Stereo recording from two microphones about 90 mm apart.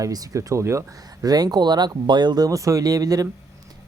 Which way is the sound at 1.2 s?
45° right (ahead or behind).